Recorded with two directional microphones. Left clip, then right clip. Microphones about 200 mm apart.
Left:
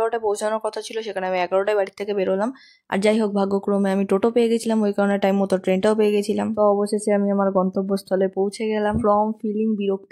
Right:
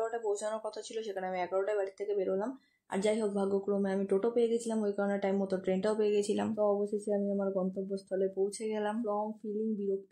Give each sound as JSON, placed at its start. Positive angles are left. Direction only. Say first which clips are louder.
{"t": 0.0, "sound": "speech", "louder": "left 12 dB", "side_deg": 40}